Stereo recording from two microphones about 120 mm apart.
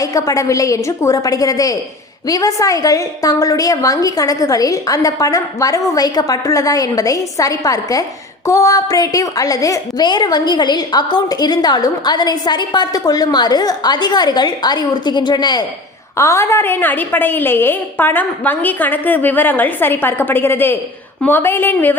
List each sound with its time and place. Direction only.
0.0 s a woman's voice: 30° left (ahead or behind)
16.1 s a woman's voice: 25° left (ahead or behind)